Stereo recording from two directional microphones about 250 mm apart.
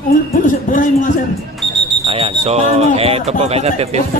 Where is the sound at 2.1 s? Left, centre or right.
Right.